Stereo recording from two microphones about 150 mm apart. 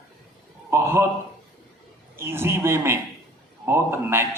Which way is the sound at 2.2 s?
15° right (ahead or behind).